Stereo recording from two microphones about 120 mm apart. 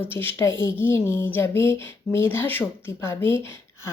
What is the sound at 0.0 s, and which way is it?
Speech, 20° left (ahead or behind).